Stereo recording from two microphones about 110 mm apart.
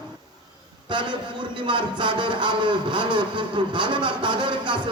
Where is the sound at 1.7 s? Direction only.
45° right (ahead or behind).